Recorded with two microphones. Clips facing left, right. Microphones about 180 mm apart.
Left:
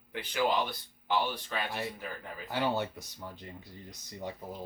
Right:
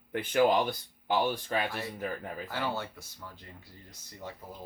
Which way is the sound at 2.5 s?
15° left (ahead or behind).